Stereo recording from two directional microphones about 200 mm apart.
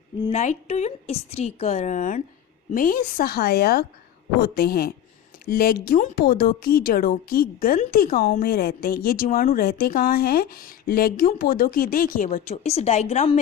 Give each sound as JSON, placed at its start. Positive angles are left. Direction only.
{"t": 0.2, "sound": "a woman's voice", "side_deg": 30}